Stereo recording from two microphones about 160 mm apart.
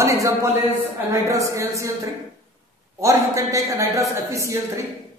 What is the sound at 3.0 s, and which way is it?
A man's voice, 20° right (ahead or behind).